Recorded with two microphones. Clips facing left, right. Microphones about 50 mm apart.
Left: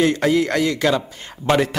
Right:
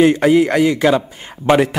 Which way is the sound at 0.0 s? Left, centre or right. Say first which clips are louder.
Right 6 dB; centre.